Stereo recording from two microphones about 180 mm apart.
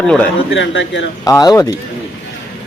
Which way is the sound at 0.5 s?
90° left.